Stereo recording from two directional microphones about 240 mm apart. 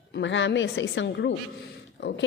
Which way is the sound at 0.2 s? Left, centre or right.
Left.